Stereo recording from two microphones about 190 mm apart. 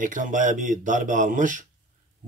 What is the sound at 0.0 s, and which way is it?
A man's voice, 45° right (ahead or behind).